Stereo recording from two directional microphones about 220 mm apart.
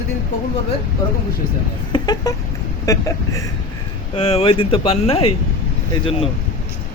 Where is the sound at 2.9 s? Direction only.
15° left (ahead or behind).